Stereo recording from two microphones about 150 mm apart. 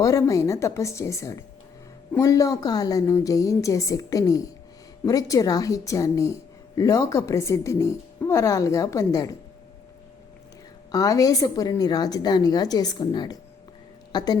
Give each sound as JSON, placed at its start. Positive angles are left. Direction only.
{"t": 0.0, "sound": "a woman's voice", "side_deg": 20}
{"t": 10.9, "sound": "a woman's voice", "side_deg": 25}